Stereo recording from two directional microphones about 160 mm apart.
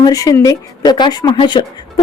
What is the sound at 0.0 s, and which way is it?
Speech, 20° left (ahead or behind).